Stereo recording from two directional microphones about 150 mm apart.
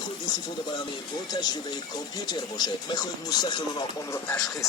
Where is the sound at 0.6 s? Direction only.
30° left (ahead or behind).